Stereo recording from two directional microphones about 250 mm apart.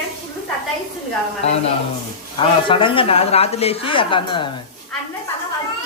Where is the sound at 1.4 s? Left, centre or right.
Left.